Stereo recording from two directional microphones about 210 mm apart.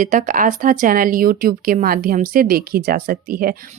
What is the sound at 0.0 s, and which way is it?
Speech, 40° right (ahead or behind).